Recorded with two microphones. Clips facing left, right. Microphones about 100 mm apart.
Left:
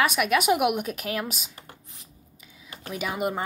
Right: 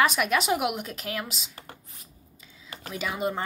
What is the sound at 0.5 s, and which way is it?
Speech, 20° left (ahead or behind).